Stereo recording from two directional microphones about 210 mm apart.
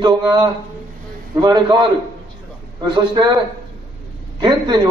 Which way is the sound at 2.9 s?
20° right (ahead or behind).